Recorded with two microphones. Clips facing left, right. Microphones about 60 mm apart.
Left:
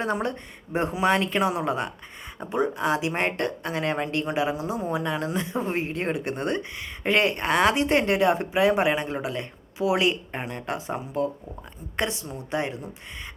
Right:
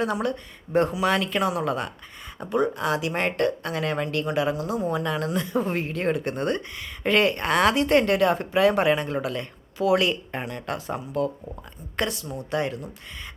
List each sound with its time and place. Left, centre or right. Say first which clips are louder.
0.0 s speech: right 1 dB; left
0.7 s speech: right 5 dB; centre
0.9 s speech: left 1 dB; left